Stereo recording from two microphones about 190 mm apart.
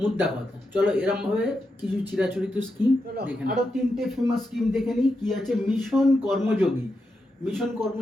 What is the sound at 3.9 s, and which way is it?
Speech, centre (ahead or behind).